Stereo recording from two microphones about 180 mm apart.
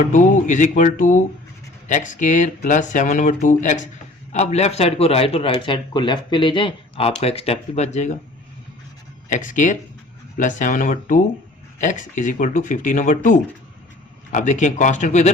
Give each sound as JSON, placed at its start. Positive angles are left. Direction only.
{"t": 0.0, "sound": "a man's voice", "side_deg": 45}
{"t": 9.3, "sound": "a man's voice", "side_deg": 45}